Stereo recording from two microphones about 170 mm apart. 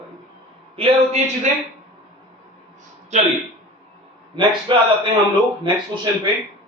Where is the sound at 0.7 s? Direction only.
35° right (ahead or behind).